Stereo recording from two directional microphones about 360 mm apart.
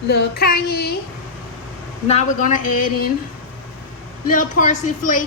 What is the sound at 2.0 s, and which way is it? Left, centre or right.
A woman's voice, centre.